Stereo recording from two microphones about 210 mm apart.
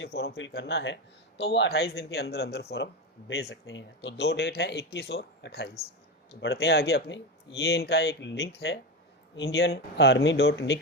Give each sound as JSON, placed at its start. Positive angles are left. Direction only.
{"t": 0.0, "sound": "speech", "side_deg": 50}